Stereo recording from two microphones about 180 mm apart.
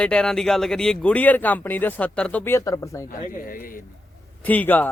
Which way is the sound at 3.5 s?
50° left (ahead or behind).